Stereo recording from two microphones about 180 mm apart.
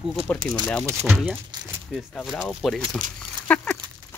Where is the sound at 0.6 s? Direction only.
10° left (ahead or behind).